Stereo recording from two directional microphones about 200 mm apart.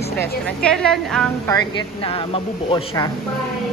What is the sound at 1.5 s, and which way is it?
Speech, 25° left (ahead or behind).